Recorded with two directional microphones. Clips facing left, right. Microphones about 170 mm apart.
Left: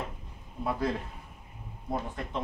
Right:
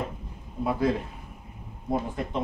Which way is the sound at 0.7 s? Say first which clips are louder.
Right 5 dB; 5° right (ahead or behind).